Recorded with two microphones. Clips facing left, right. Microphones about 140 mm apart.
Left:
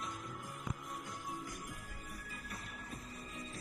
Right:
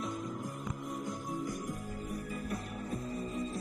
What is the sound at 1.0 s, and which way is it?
Music, 45° right (ahead or behind).